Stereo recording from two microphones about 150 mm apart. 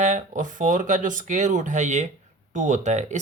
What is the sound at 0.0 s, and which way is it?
Speech, 55° right (ahead or behind).